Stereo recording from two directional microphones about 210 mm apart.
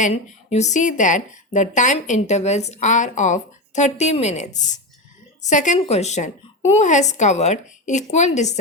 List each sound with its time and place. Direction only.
0.0 s a woman's voice: 30° left (ahead or behind)